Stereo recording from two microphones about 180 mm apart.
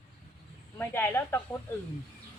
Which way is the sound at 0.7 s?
10° left (ahead or behind).